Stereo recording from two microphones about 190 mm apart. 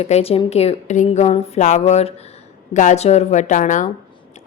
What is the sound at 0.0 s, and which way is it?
A woman's voice, 30° left (ahead or behind).